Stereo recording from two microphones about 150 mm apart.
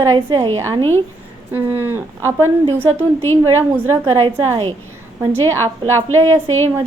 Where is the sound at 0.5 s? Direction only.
20° right (ahead or behind).